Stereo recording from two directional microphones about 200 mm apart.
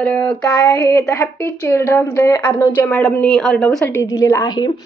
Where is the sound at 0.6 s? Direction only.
20° left (ahead or behind); by 3.9 s centre (ahead or behind).